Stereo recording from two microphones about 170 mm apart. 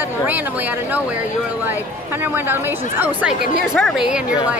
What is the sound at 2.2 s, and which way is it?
A woman's voice, 10° right (ahead or behind).